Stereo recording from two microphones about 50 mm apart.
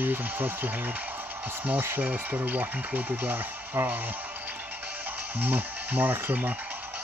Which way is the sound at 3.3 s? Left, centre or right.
Right.